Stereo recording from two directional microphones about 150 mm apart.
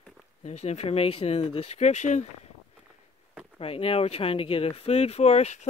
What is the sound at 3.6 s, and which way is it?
Speech, 40° left (ahead or behind).